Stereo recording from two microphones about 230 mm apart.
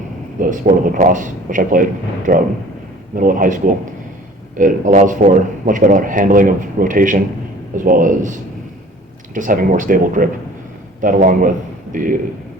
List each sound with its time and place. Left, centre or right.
0.3 s a man's voice: right